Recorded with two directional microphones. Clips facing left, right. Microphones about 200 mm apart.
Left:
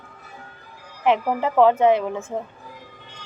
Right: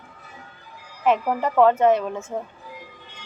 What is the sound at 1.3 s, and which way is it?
Speech, 10° left (ahead or behind).